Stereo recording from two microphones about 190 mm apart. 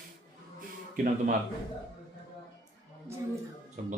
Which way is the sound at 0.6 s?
45° right (ahead or behind).